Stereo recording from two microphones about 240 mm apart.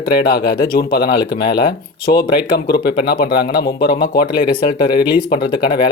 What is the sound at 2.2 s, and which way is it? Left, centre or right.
Speech, left.